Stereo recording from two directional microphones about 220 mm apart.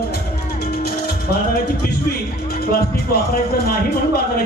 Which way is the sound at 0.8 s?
45° left (ahead or behind).